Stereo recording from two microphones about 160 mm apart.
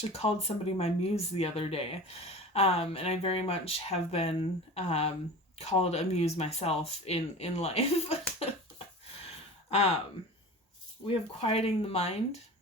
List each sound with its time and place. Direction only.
0.0 s speech: 40° left (ahead or behind)
11.0 s speech: 35° left (ahead or behind)